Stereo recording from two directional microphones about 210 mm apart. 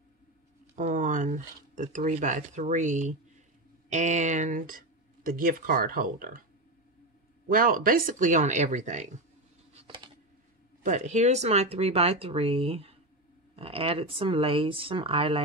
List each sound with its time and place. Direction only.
0.7 s speech: 35° right (ahead or behind)
7.4 s speech: 45° right (ahead or behind)
9.8 s a sound: 25° right (ahead or behind)
10.8 s speech: 35° right (ahead or behind)